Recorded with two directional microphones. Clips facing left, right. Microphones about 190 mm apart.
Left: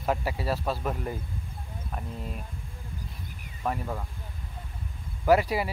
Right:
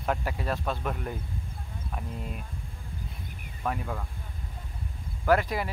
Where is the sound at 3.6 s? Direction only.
5° left (ahead or behind).